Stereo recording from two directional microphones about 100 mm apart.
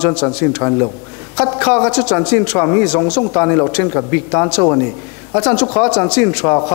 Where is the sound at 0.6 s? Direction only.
25° left (ahead or behind).